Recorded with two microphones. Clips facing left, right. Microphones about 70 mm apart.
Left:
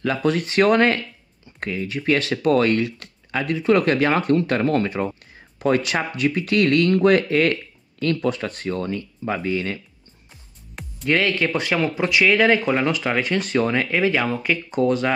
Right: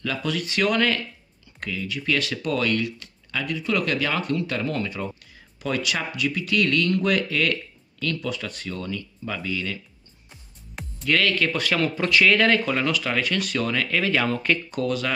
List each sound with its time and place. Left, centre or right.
0.0 s speech: left
11.1 s speech: left
14.7 s speech: left